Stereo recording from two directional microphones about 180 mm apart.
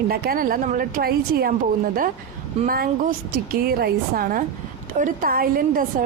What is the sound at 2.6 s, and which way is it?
A woman's voice, 50° right (ahead or behind).